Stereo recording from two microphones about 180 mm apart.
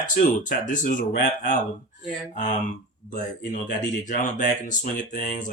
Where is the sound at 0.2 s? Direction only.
45° left (ahead or behind).